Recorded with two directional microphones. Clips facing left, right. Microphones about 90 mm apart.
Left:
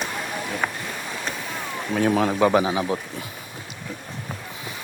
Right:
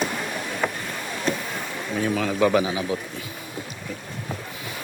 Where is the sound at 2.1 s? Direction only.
35° left (ahead or behind).